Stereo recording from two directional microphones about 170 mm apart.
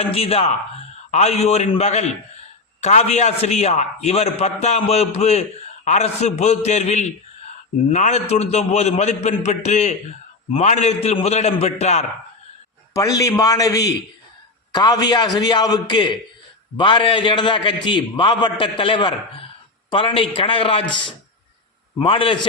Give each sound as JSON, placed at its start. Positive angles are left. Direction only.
{"t": 0.1, "sound": "a man's voice", "side_deg": 35}
{"t": 12.9, "sound": "a man's voice", "side_deg": 20}